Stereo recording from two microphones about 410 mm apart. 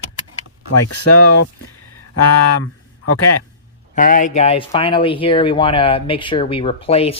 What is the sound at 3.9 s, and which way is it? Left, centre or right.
Speech, centre.